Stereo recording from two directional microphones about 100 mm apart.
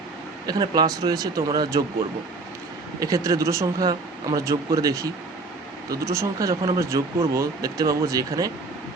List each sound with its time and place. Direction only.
0.4 s speech: 45° right (ahead or behind)
3.0 s speech: 35° right (ahead or behind)